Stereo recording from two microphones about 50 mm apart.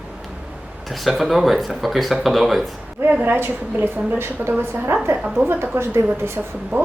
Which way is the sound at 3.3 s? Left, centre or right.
Right.